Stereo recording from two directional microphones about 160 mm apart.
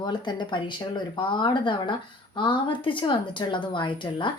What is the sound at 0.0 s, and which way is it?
Speech, 30° left (ahead or behind).